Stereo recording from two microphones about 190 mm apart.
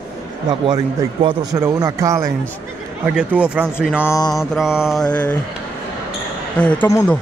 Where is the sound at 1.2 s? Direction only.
20° right (ahead or behind).